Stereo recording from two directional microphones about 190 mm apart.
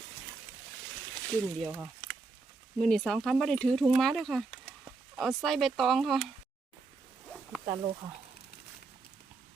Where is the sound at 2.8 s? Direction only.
Centre (ahead or behind).